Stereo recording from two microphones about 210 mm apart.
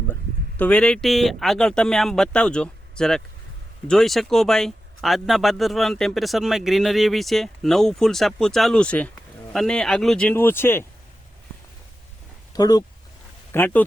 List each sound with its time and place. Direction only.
0.1 s speech: 10° left (ahead or behind)
12.5 s speech: 20° left (ahead or behind)